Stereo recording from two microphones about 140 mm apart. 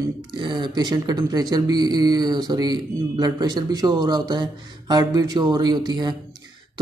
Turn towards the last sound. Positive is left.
turn(degrees=-30)  # may be behind; listen again after turning